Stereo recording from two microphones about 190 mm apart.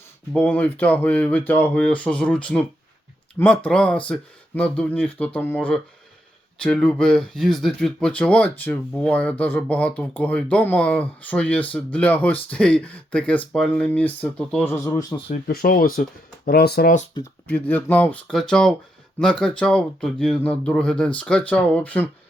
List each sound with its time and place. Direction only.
0.3 s speech: 10° left (ahead or behind)
15.3 s speech: 50° left (ahead or behind)
17.2 s speech: 25° left (ahead or behind)
17.5 s speech: 10° left (ahead or behind)